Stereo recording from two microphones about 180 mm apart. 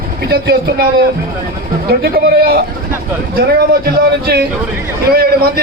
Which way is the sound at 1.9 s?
60° right (ahead or behind).